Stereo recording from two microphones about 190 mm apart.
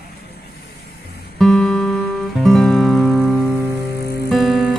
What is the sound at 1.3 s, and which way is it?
Music, centre (ahead or behind).